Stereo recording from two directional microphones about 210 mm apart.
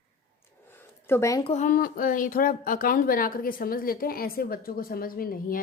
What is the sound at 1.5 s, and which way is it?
Speech, 35° left (ahead or behind).